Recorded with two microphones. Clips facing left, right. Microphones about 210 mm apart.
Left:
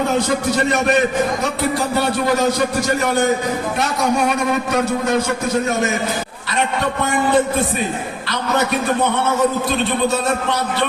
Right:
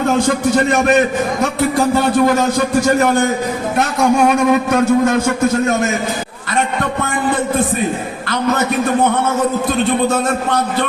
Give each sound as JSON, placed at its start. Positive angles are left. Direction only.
{"t": 3.8, "sound": "a man's voice", "side_deg": -50}